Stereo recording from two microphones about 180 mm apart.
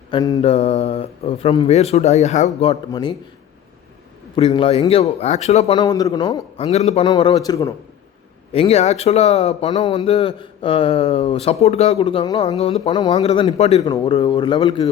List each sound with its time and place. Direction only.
0.1 s speech: 20° left (ahead or behind)
0.4 s a man's voice: 35° left (ahead or behind)
2.9 s speech: 25° left (ahead or behind)
4.4 s a man's voice: 30° left (ahead or behind)
6.6 s a man's voice: 35° left (ahead or behind)
7.1 s speech: 25° left (ahead or behind)
8.5 s a man's voice: 35° left (ahead or behind)
12.5 s a man's voice: 35° left (ahead or behind)
13.8 s speech: 25° left (ahead or behind)